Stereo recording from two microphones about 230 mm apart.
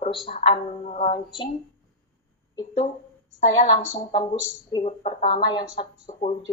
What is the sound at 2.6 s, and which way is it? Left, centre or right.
Speech, left.